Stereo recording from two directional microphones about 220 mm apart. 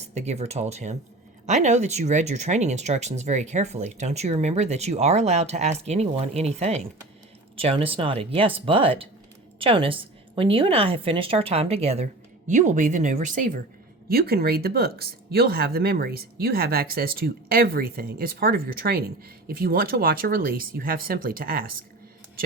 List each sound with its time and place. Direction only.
0.0 s a woman's voice: 30° right (ahead or behind)